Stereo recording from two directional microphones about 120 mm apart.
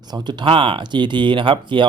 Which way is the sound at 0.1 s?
40° right (ahead or behind).